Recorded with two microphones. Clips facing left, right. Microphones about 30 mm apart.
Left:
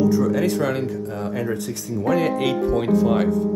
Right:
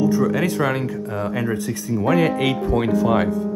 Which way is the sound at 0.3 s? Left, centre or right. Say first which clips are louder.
Even; right.